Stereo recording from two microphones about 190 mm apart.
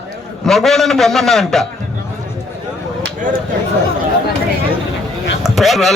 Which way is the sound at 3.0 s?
45° right (ahead or behind).